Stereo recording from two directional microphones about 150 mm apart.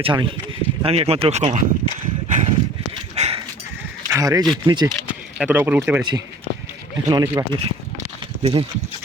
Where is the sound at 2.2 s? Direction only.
55° right (ahead or behind).